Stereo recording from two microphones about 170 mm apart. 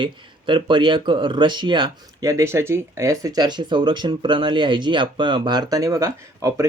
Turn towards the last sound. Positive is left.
turn(degrees=-20)  # may be behind; listen again after turning